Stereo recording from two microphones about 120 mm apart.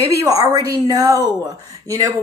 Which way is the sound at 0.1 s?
30° right (ahead or behind).